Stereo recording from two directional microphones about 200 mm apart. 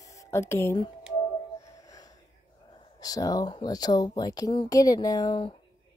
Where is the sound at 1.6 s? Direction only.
15° left (ahead or behind).